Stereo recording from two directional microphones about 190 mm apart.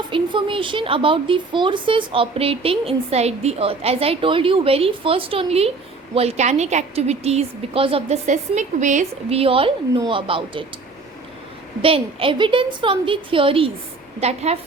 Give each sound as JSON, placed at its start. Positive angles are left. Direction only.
{"t": 0.1, "sound": "a woman's voice", "side_deg": -25}
{"t": 11.8, "sound": "a woman's voice", "side_deg": -30}